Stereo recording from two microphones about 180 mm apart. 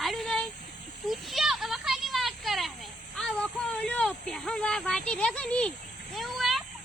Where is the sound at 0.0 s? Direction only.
Centre (ahead or behind).